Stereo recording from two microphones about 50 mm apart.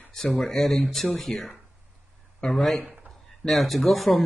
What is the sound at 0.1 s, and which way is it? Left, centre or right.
Speech, centre.